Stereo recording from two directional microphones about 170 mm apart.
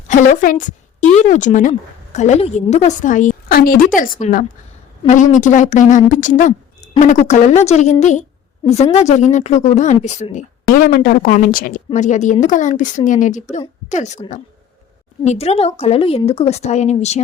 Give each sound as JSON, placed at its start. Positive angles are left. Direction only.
{"t": 0.1, "sound": "a woman's voice", "side_deg": 50}
{"t": 10.3, "sound": "a woman's voice", "side_deg": 55}